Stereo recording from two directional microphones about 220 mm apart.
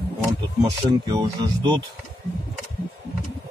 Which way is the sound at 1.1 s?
20° right (ahead or behind).